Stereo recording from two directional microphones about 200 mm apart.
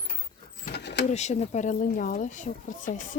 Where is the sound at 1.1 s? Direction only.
35° left (ahead or behind).